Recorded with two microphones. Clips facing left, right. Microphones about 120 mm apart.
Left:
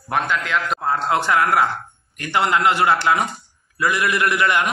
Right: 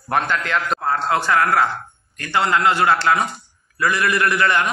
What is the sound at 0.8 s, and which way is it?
A man's voice, 20° left (ahead or behind).